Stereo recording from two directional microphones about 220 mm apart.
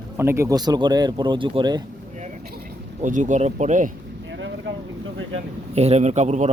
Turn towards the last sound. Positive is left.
turn(degrees=-30)  # may be behind; listen again after turning